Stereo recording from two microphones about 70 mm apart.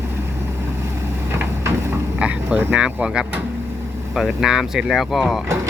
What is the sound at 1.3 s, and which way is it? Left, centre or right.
Vehicle, right.